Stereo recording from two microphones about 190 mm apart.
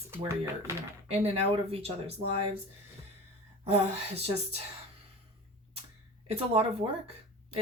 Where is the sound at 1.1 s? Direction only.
35° right (ahead or behind).